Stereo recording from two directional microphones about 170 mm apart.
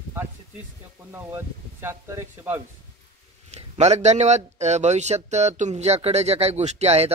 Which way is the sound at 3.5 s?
40° right (ahead or behind).